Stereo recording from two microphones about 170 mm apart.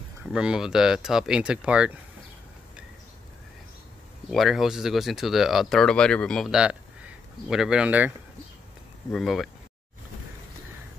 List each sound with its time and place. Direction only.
0.2 s speech: 5° right (ahead or behind)
4.3 s speech: centre (ahead or behind)
9.1 s speech: centre (ahead or behind)